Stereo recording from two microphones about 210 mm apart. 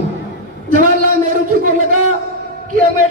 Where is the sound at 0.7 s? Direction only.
40° right (ahead or behind).